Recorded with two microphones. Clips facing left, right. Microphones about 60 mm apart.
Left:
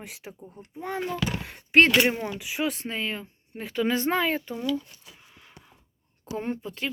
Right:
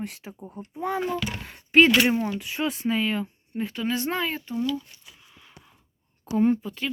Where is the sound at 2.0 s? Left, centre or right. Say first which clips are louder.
Right 1 dB; left.